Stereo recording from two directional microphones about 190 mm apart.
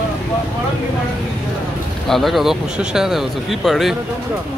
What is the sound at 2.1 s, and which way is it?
Speech, centre (ahead or behind).